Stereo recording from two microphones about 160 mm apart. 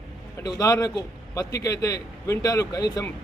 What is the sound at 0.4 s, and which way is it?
A man's voice, 20° left (ahead or behind).